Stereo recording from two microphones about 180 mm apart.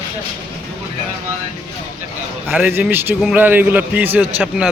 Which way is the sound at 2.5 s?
10° right (ahead or behind).